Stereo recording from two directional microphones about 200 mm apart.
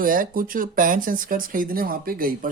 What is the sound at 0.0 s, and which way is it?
A man's voice, 45° right (ahead or behind).